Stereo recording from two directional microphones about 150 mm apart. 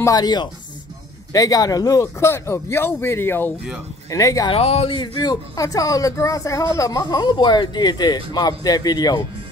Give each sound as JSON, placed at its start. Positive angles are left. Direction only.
{"t": 0.0, "sound": "speech", "side_deg": 25}
{"t": 4.5, "sound": "speech", "side_deg": 40}